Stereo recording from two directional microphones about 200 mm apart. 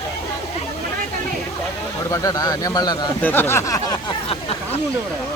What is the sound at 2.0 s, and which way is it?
Speech, 15° left (ahead or behind).